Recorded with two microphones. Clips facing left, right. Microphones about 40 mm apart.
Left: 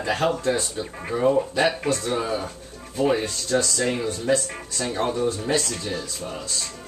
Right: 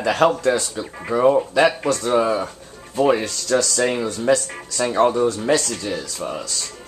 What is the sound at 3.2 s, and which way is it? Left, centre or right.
Speech, right.